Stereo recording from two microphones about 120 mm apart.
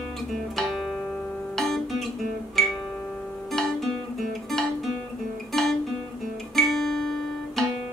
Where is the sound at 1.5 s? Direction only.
5° left (ahead or behind).